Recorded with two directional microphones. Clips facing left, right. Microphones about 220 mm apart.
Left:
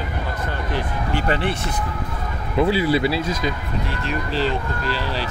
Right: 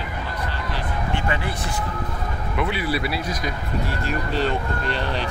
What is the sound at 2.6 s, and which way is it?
Speech, 30° left (ahead or behind).